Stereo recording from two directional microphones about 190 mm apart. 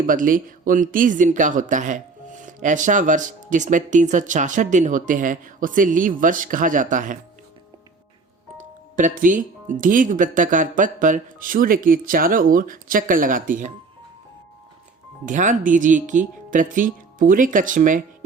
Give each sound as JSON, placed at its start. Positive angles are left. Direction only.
{"t": 0.1, "sound": "speech", "side_deg": -45}
{"t": 9.0, "sound": "speech", "side_deg": -45}
{"t": 15.3, "sound": "speech", "side_deg": -40}